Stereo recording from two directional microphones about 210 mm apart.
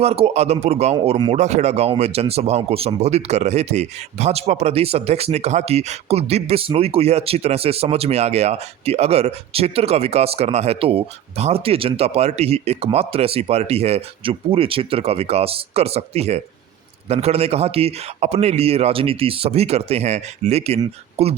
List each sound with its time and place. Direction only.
0.0 s speech: 30° right (ahead or behind)